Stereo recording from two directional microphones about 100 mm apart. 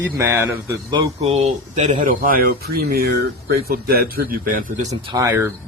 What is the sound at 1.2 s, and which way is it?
Speech, 90° right.